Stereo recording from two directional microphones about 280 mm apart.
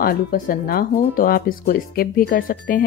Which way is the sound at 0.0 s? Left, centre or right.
Left.